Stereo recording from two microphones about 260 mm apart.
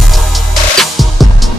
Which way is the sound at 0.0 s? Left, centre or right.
Centre.